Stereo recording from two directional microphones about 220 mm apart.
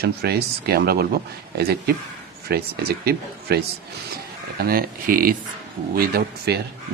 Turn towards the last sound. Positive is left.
turn(degrees=-45)  # may be behind; listen again after turning